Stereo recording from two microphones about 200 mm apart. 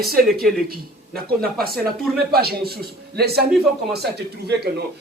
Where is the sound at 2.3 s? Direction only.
50° right (ahead or behind).